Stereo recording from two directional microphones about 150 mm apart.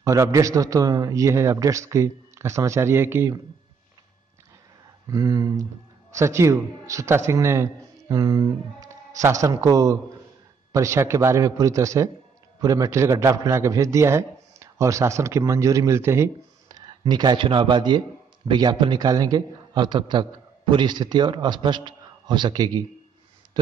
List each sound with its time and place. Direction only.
0.0 s a man's voice: 20° right (ahead or behind)
5.0 s a man's voice: 25° right (ahead or behind)